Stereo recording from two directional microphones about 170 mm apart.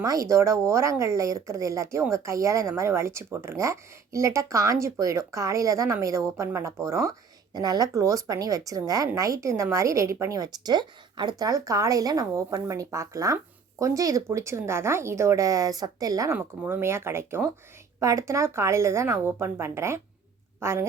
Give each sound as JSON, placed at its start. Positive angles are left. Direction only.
{"t": 0.0, "sound": "a woman's voice", "side_deg": -20}